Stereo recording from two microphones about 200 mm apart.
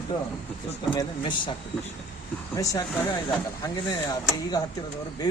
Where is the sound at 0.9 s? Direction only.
25° left (ahead or behind).